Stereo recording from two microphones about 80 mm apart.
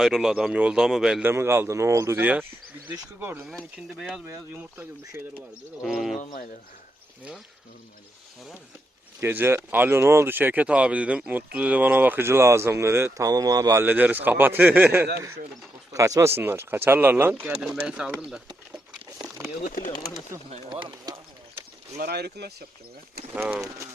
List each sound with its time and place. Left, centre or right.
0.0 s speech: centre
1.2 s speech: right
2.2 s speech: right
3.8 s speech: centre
4.5 s speech: right
5.8 s speech: centre
9.2 s speech: right
13.1 s speech: right
13.8 s speech: right
15.9 s speech: right
16.3 s speech: right; by 18.4 s centre
19.9 s speech: left
20.7 s speech: right
23.6 s speech: right